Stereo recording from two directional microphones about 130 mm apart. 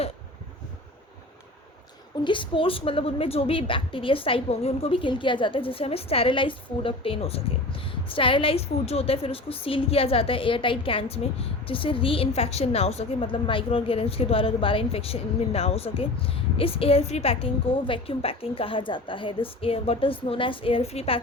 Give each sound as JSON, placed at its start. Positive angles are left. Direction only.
{"t": 2.2, "sound": "speech", "side_deg": 40}
{"t": 13.2, "sound": "speech", "side_deg": 40}